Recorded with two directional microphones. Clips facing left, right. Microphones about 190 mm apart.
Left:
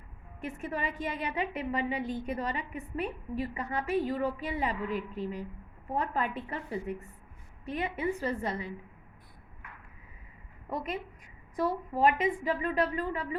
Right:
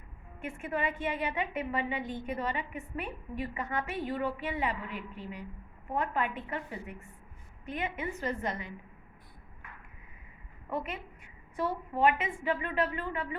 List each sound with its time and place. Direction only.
0.4 s a woman's voice: 40° left (ahead or behind)
10.7 s a woman's voice: 35° left (ahead or behind)